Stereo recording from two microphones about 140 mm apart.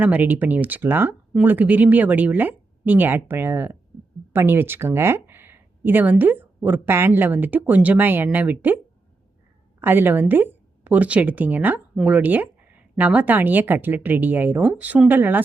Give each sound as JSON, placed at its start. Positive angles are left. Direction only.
{"t": 0.0, "sound": "speech", "side_deg": -10}
{"t": 9.8, "sound": "speech", "side_deg": -15}